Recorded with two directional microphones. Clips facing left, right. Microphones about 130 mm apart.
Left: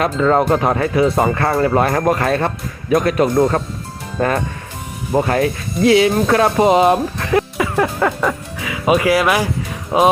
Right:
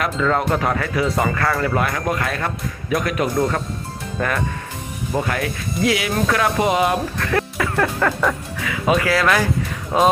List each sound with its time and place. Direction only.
0.0 s speech: 30° left (ahead or behind)
7.3 s music: 15° left (ahead or behind)
8.2 s speech: 5° left (ahead or behind)